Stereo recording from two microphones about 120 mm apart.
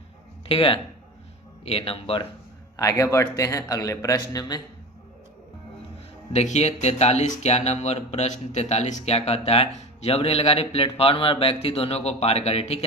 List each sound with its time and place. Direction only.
0.4 s speech: 50° left (ahead or behind)
2.7 s speech: 25° left (ahead or behind)
6.3 s speech: 70° left (ahead or behind)